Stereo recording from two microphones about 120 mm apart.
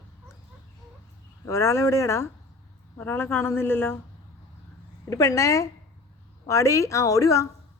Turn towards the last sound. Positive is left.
turn(degrees=25)  # may be behind; listen again after turning